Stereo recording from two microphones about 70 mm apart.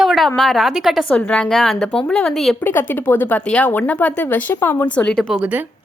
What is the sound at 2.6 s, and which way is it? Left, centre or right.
Speech, left.